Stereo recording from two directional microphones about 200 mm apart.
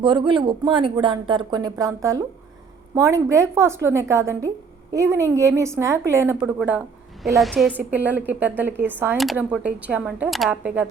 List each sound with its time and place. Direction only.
0.0 s a woman's voice: 25° right (ahead or behind); by 7.8 s centre (ahead or behind)
7.8 s speech: 10° right (ahead or behind)